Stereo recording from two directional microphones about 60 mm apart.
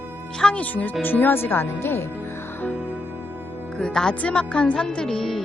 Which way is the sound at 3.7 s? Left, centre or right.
Centre.